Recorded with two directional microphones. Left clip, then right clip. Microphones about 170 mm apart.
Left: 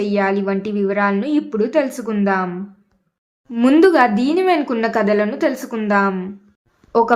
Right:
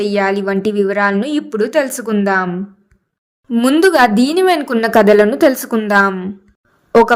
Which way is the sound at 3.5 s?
30° right (ahead or behind).